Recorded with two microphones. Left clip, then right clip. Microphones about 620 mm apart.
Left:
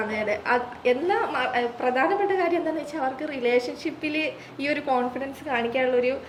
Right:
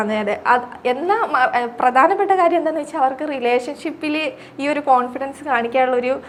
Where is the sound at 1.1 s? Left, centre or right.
Right.